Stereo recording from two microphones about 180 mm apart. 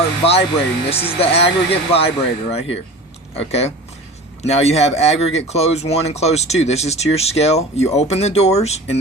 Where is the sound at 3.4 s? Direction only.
35° left (ahead or behind).